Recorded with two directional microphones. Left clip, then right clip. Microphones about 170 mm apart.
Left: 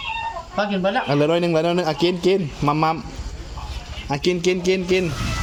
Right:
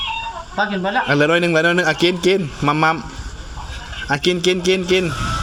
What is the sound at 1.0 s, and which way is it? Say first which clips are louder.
A man's voice: right 7 dB; centre (ahead or behind).